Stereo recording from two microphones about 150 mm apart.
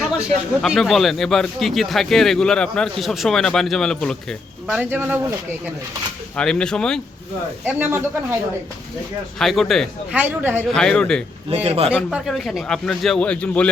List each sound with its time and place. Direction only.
0.6 s speech: centre (ahead or behind)
4.8 s speech: 15° right (ahead or behind)
6.3 s speech: 5° left (ahead or behind)
7.6 s speech: 10° right (ahead or behind)
9.4 s speech: centre (ahead or behind)
10.2 s speech: 10° right (ahead or behind)
10.7 s speech: 5° left (ahead or behind)
11.5 s a man's voice: 40° right (ahead or behind)
12.1 s speech: centre (ahead or behind)